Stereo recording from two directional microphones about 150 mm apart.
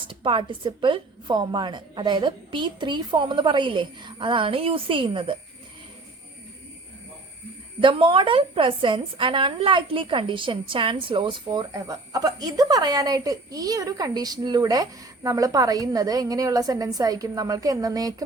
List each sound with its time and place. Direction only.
0.1 s a woman's voice: 35° right (ahead or behind)
7.8 s a woman's voice: 35° right (ahead or behind)